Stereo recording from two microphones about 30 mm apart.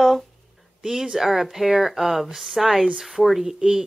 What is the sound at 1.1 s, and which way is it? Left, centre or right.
Speech, centre.